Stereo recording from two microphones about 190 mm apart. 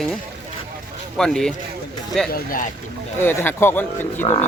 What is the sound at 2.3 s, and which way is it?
Speech, 45° left (ahead or behind).